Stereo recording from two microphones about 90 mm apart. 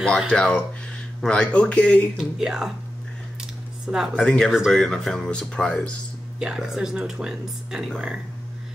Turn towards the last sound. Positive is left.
turn(degrees=-5)  # may be behind; listen again after turning